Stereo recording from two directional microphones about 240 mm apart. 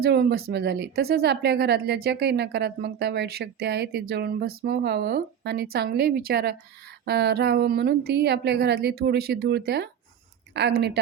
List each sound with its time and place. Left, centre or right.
0.0 s speech: right